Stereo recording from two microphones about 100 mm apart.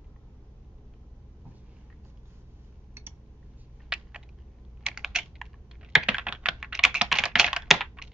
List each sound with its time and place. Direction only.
2.9 s a sound: 20° right (ahead or behind)
3.9 s typing: 5° right (ahead or behind)
4.8 s computer keyboard: 5° right (ahead or behind)